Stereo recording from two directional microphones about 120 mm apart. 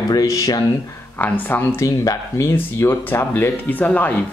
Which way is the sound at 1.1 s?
15° left (ahead or behind).